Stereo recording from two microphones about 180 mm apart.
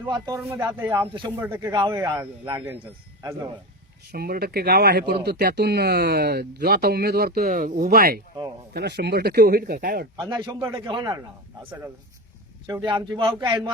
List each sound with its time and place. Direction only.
0.1 s a man's voice: 20° right (ahead or behind)
4.1 s speech: 60° right (ahead or behind)
10.2 s a man's voice: 20° right (ahead or behind)
11.6 s a man's voice: 10° right (ahead or behind)
12.6 s a man's voice: 20° right (ahead or behind)